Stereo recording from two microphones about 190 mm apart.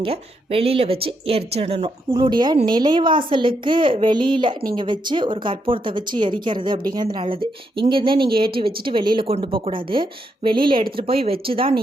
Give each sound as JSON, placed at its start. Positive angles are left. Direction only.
{"t": 0.0, "sound": "a woman's voice", "side_deg": -30}